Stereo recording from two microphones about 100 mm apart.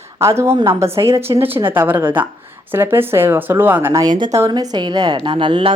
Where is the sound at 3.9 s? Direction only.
45° right (ahead or behind).